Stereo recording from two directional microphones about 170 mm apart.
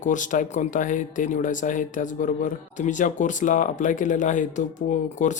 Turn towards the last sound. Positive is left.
turn(degrees=45)  # may be behind; listen again after turning